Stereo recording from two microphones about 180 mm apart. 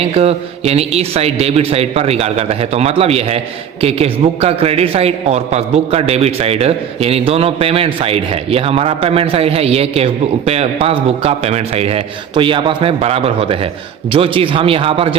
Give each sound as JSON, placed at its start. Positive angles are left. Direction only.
{"t": 0.0, "sound": "speech", "side_deg": -35}